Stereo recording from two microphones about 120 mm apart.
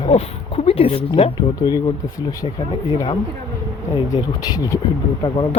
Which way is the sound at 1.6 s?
35° left (ahead or behind).